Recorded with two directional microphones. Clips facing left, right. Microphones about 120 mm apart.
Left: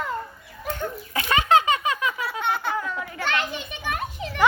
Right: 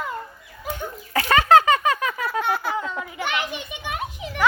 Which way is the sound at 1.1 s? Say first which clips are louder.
Right 4 dB; 50° right (ahead or behind).